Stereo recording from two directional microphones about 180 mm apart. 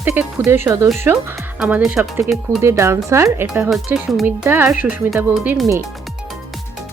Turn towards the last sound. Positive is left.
turn(degrees=-5)  # may be behind; listen again after turning